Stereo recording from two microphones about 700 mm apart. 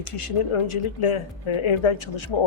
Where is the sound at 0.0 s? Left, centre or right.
Left.